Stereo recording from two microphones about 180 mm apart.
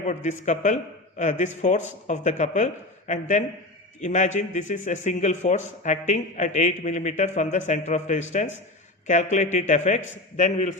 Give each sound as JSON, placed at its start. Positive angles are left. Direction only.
{"t": 0.0, "sound": "a man's voice", "side_deg": 40}